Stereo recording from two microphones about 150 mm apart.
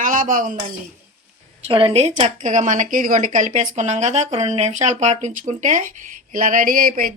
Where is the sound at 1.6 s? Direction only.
40° right (ahead or behind).